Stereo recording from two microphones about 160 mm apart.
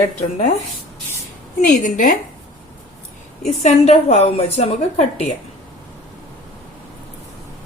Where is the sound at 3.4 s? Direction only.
45° left (ahead or behind).